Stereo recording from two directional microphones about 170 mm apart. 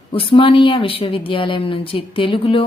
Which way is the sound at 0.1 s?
30° left (ahead or behind).